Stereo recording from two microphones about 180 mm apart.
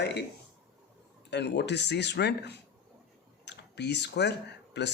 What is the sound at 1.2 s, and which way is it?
Speech, 70° left (ahead or behind).